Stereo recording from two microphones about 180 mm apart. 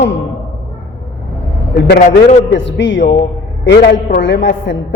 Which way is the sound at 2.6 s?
90° left.